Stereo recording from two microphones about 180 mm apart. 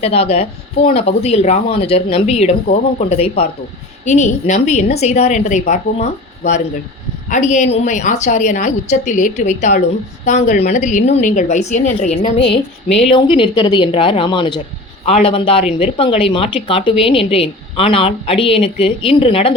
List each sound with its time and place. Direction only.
0.0 s a woman's voice: 35° left (ahead or behind)